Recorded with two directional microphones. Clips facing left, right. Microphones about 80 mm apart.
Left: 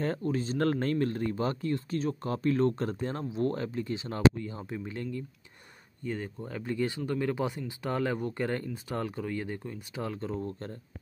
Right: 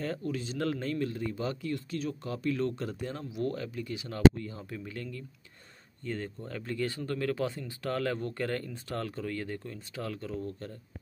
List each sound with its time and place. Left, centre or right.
0.0 s speech: left
6.0 s speech: centre; by 10.8 s left